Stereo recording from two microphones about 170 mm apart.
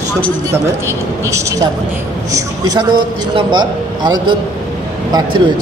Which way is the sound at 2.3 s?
20° right (ahead or behind).